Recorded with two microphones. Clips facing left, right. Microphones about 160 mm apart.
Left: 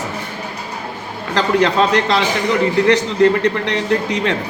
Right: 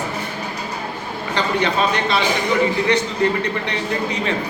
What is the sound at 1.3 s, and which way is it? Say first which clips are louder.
A man's voice: left 5 dB; 90° left.